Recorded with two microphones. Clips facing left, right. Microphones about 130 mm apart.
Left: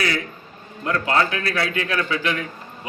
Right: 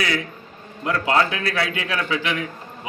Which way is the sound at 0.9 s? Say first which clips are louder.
Right 1 dB; 10° right (ahead or behind).